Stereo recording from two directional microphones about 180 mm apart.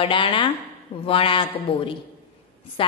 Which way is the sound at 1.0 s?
30° left (ahead or behind).